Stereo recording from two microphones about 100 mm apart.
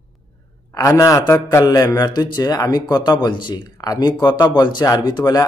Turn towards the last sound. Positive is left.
turn(degrees=40)  # may be behind; listen again after turning